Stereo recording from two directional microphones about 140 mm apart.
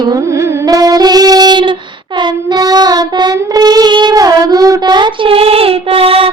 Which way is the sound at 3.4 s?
25° right (ahead or behind).